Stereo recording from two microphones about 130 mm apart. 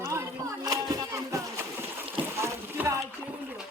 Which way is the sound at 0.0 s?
20° right (ahead or behind).